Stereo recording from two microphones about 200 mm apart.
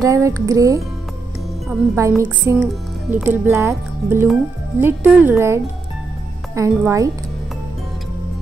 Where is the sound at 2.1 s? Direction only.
5° right (ahead or behind).